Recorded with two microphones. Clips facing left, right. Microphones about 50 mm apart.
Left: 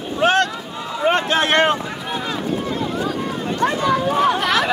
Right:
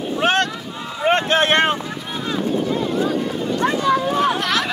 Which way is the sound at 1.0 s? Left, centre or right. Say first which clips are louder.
Right 1 dB; right.